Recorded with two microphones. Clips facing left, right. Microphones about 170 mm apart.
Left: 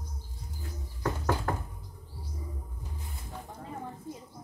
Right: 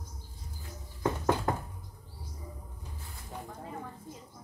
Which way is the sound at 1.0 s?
20° right (ahead or behind).